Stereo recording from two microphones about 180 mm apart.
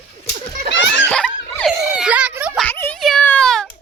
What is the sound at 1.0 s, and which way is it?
Giggle, 5° left (ahead or behind).